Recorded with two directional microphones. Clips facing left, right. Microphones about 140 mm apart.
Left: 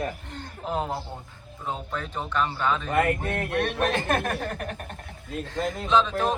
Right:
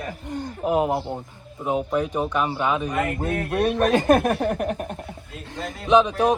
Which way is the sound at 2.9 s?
60° left (ahead or behind).